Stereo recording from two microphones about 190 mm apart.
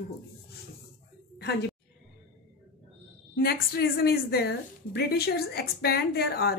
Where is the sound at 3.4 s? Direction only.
55° left (ahead or behind).